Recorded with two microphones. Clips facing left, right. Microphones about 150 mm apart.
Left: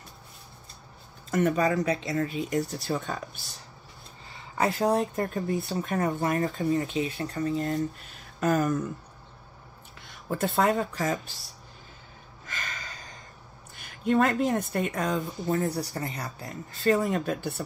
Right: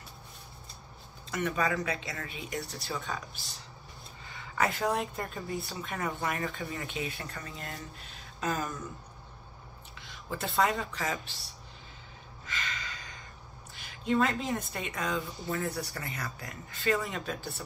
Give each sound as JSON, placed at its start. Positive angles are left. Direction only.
{"t": 1.3, "sound": "speech", "side_deg": 45}
{"t": 4.3, "sound": "speech", "side_deg": 35}
{"t": 9.9, "sound": "speech", "side_deg": 50}
{"t": 12.4, "sound": "gasp", "side_deg": 45}
{"t": 13.7, "sound": "speech", "side_deg": 50}